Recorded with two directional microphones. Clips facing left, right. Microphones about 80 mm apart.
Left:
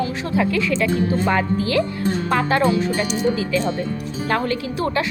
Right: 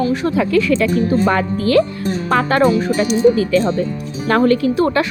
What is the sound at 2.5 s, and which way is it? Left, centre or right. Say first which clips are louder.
Speech: right 5 dB; right.